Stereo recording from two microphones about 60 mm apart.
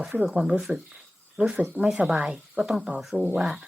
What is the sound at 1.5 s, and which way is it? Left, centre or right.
Speech, right.